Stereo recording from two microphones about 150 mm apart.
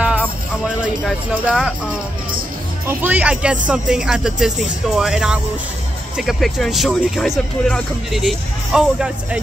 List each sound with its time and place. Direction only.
0.0 s music: 10° right (ahead or behind)
3.0 s speech: 10° right (ahead or behind)